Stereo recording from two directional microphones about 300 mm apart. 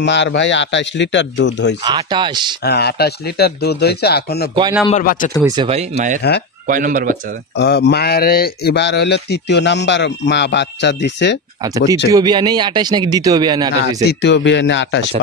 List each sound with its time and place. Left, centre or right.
0.0 s speech: left
1.9 s speech: centre
2.6 s a man's voice: left
5.4 s speech: centre
7.5 s speech: left
11.6 s speech: centre
14.0 s speech: left